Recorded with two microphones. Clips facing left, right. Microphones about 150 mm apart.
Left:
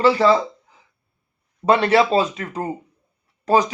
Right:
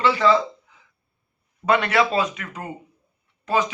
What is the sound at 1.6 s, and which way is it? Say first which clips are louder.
Speech: left 4 dB; 30° left (ahead or behind).